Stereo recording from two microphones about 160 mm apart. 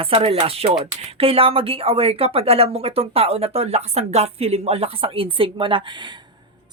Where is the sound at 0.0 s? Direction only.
35° right (ahead or behind).